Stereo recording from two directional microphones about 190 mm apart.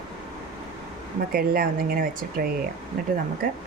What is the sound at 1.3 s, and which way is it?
Speech, 50° right (ahead or behind).